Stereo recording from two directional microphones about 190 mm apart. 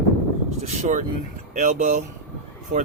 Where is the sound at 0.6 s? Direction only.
40° right (ahead or behind).